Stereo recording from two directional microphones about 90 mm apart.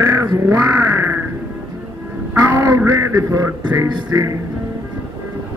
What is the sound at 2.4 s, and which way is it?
Music, 30° right (ahead or behind).